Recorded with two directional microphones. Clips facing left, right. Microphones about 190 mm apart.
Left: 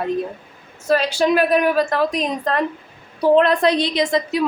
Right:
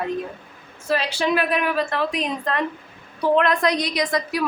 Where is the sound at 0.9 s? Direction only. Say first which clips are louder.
Left 5 dB; 45° left (ahead or behind).